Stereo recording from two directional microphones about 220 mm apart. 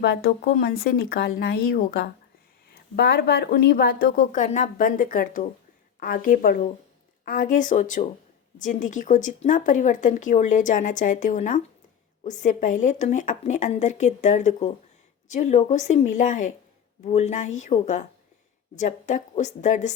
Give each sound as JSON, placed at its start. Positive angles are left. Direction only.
{"t": 0.0, "sound": "speech", "side_deg": 45}